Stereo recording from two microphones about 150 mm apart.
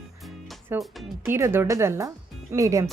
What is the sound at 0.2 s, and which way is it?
Music, centre (ahead or behind).